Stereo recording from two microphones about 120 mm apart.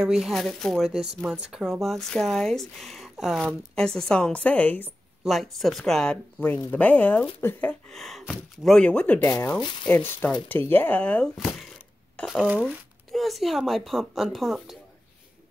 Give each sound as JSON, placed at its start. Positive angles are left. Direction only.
{"t": 0.0, "sound": "speech", "side_deg": -5}
{"t": 0.9, "sound": "speech", "side_deg": -5}
{"t": 5.2, "sound": "speech", "side_deg": 0}
{"t": 6.4, "sound": "speech", "side_deg": 15}
{"t": 7.9, "sound": "speech", "side_deg": 0}
{"t": 12.3, "sound": "speech", "side_deg": -5}